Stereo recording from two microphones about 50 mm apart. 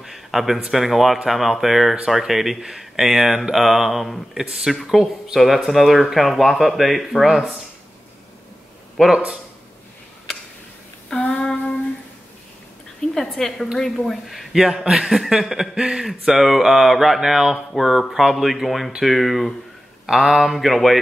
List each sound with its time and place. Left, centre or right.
0.0 s a sound: centre
0.7 s speech: centre
9.0 s speech: centre
11.3 s child singing: centre
13.1 s a man's voice: centre
16.3 s speech: centre